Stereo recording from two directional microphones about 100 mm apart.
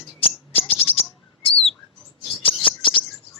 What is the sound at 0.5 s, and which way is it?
Bird, 75° left (ahead or behind).